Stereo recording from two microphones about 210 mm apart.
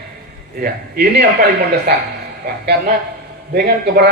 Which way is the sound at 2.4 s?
50° right (ahead or behind).